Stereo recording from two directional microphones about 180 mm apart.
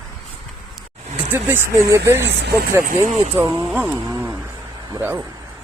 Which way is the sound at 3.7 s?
10° right (ahead or behind).